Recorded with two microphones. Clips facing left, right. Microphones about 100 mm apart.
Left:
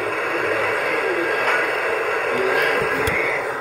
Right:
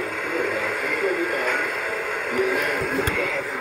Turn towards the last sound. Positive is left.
turn(degrees=85)